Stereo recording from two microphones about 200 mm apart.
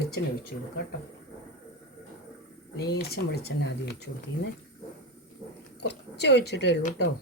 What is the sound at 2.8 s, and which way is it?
Speech, 55° left (ahead or behind).